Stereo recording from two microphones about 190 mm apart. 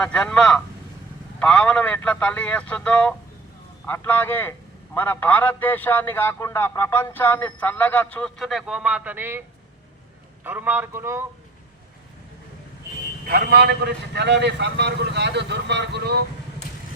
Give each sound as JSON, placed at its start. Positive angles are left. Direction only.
{"t": 0.0, "sound": "a man's voice", "side_deg": 5}
{"t": 10.4, "sound": "a man's voice", "side_deg": -10}
{"t": 13.2, "sound": "speech", "side_deg": -55}